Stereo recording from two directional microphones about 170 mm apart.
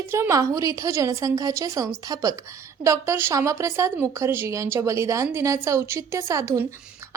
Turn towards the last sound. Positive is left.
turn(degrees=-20)  # may be behind; listen again after turning